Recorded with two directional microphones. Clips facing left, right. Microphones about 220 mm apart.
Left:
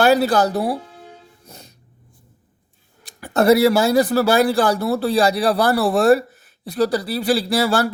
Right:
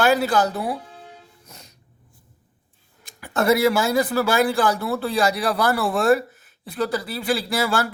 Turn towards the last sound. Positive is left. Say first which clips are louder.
# left 4 dB
turn(degrees=35)  # may be behind; listen again after turning